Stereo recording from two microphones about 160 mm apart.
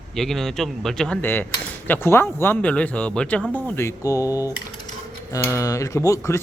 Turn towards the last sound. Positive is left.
turn(degrees=20)  # may be behind; listen again after turning